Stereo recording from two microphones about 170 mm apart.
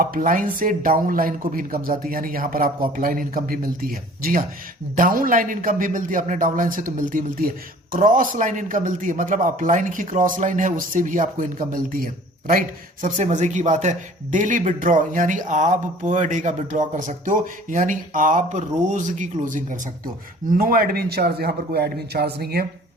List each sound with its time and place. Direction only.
0.0 s a man's voice: 55° right (ahead or behind)
13.1 s a man's voice: 45° right (ahead or behind); by 22.6 s 70° right (ahead or behind)